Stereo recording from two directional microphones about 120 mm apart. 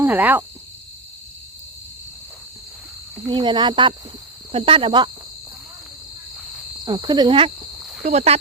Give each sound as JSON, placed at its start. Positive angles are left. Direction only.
{"t": 0.0, "sound": "cricket", "side_deg": -15}
{"t": 3.2, "sound": "speech", "side_deg": -40}
{"t": 6.8, "sound": "speech", "side_deg": -35}
{"t": 7.8, "sound": "a sound", "side_deg": 0}
{"t": 8.0, "sound": "speech", "side_deg": -65}